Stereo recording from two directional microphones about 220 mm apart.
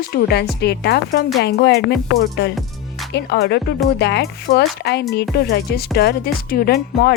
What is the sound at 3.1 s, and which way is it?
Speech, 50° left (ahead or behind).